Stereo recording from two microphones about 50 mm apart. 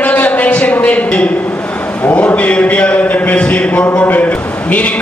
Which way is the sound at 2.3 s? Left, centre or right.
Left.